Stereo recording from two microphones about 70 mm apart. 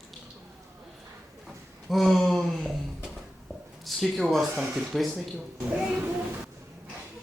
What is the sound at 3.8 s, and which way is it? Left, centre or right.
Speech, centre.